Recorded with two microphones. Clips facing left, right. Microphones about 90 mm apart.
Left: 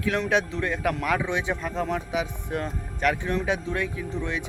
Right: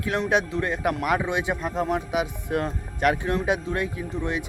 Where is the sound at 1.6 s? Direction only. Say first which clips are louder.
Right 2 dB; 20° right (ahead or behind).